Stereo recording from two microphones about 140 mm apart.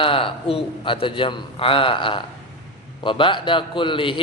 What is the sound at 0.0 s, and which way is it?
A man's voice, 40° left (ahead or behind).